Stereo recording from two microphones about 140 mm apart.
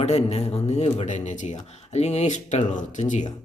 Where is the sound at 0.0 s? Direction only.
50° left (ahead or behind).